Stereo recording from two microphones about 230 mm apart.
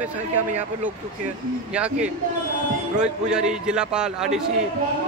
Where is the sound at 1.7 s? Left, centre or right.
Centre.